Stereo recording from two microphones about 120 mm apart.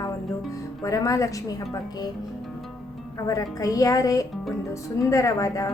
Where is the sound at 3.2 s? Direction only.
30° left (ahead or behind).